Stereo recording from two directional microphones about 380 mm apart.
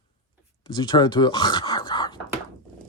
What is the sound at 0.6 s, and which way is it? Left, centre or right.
Speech, centre.